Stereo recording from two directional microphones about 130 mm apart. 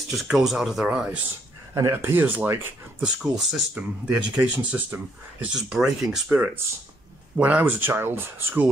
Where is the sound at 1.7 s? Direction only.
20° right (ahead or behind).